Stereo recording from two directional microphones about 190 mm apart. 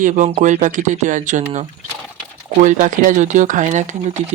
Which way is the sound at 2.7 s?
40° right (ahead or behind).